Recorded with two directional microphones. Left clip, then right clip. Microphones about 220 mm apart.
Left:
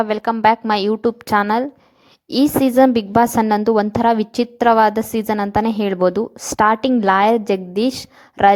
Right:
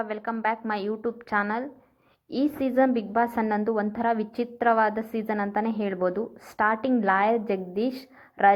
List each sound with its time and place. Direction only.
0.0 s a woman's voice: 55° left (ahead or behind)